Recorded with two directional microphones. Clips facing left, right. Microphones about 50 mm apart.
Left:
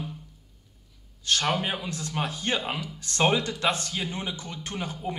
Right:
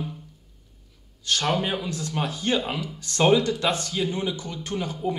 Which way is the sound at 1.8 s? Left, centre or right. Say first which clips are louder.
Right 2 dB; left.